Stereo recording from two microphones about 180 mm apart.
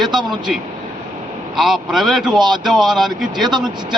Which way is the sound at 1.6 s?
Centre (ahead or behind).